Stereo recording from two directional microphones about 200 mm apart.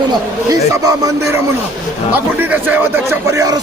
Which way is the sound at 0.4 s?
15° right (ahead or behind).